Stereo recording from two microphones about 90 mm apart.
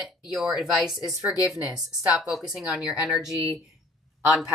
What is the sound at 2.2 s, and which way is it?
Speech, 5° right (ahead or behind).